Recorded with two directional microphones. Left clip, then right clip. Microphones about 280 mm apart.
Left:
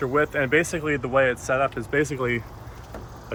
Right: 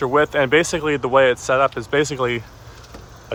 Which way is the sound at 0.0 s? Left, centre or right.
Centre.